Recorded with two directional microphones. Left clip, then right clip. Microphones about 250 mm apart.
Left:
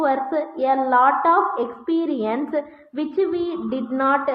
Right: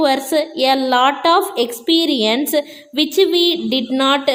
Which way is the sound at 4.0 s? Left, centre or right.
Right.